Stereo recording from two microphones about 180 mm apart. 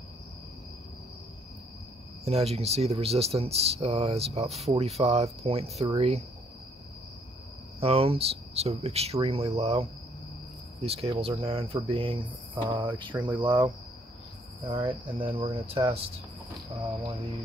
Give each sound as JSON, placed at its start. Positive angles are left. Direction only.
{"t": 2.2, "sound": "speech", "side_deg": -35}
{"t": 7.8, "sound": "speech", "side_deg": -35}
{"t": 14.7, "sound": "speech", "side_deg": -30}